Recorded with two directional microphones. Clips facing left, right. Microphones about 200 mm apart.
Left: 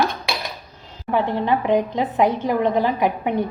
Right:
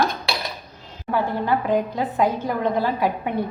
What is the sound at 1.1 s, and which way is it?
A woman's voice, 20° left (ahead or behind).